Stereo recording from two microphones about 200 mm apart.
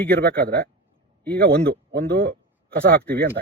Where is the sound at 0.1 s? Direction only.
50° right (ahead or behind).